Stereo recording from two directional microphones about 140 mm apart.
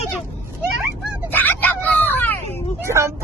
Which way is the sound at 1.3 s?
15° left (ahead or behind).